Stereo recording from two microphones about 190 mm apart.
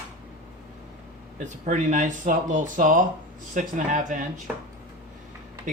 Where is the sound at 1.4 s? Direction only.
40° right (ahead or behind).